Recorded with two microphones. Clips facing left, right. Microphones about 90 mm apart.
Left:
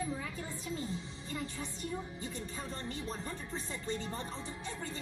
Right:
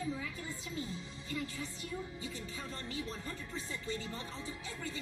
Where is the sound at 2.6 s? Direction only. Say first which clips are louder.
Even; 30° left (ahead or behind).